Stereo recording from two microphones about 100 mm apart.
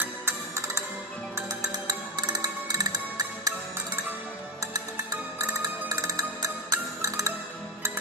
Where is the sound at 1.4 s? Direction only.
40° right (ahead or behind).